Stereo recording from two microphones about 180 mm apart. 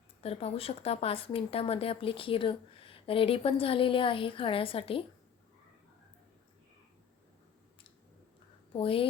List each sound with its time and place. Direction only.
0.2 s speech: 35° left (ahead or behind)
8.7 s speech: 30° left (ahead or behind)